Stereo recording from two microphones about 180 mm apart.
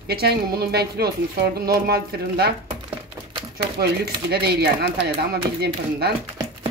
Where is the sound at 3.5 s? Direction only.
60° right (ahead or behind).